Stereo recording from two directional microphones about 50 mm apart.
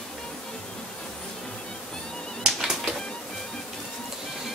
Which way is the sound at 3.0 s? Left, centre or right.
Centre.